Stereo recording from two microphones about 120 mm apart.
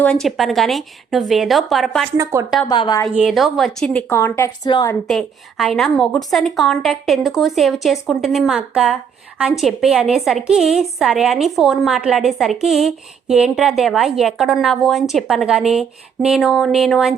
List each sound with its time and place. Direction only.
0.0 s a woman's voice: 5° left (ahead or behind)
2.1 s speech: 25° right (ahead or behind)
2.6 s a woman's voice: 40° left (ahead or behind)
3.1 s a woman's voice: 10° right (ahead or behind)
3.3 s a woman's voice: centre (ahead or behind)
4.1 s a woman's voice: 20° left (ahead or behind)
4.6 s a woman's voice: 35° left (ahead or behind)
5.0 s a woman's voice: centre (ahead or behind)